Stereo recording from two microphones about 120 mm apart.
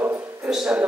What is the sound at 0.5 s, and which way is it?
Dog, 5° right (ahead or behind).